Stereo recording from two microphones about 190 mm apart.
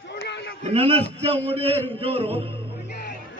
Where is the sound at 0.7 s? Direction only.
30° right (ahead or behind).